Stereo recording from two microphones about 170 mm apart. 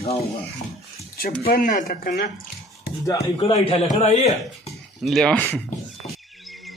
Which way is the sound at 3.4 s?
35° left (ahead or behind).